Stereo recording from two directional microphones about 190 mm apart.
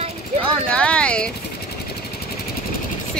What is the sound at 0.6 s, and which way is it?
Speech, 5° left (ahead or behind).